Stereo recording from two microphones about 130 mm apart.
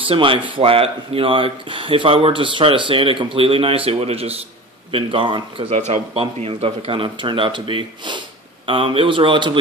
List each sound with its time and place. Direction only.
0.1 s a man's voice: 45° right (ahead or behind)
5.8 s a man's voice: 55° right (ahead or behind); by 9.6 s 40° right (ahead or behind)